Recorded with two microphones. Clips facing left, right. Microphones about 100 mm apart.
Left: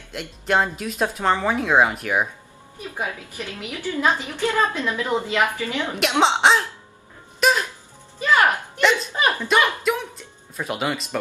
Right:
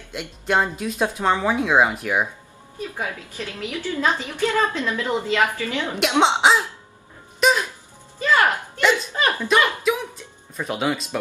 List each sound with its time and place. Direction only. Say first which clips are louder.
0.1 s speech: even; centre (ahead or behind)
3.0 s a woman's voice: left 3 dB; 15° left (ahead or behind)
5.9 s speech: right 1 dB; centre (ahead or behind)
7.3 s a sound: right 1 dB; centre (ahead or behind)
8.2 s music: left 1 dB; 15° left (ahead or behind)
9.1 s a sound: even; 15° left (ahead or behind)
9.5 s music: right 2 dB; centre (ahead or behind)